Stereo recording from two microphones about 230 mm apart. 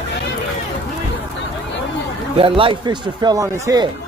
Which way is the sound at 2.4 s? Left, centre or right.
Right.